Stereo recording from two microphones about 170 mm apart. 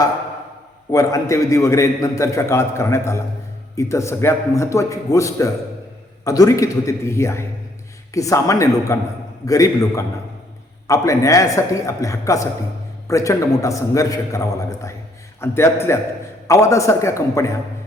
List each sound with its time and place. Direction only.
0.9 s a man's voice: 20° left (ahead or behind)